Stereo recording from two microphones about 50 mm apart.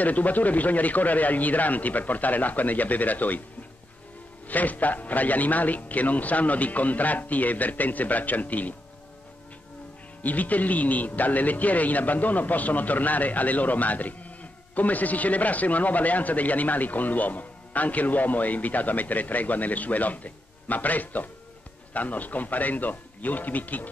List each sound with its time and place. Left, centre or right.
0.0 s speech: left
4.5 s speech: left
10.2 s speech: left